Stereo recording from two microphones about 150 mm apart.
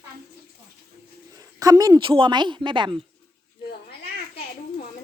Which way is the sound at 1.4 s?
25° right (ahead or behind).